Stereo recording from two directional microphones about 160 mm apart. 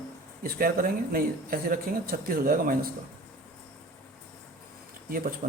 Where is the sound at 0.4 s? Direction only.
65° right (ahead or behind).